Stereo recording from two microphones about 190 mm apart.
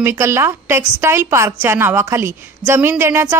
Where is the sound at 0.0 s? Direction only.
15° right (ahead or behind).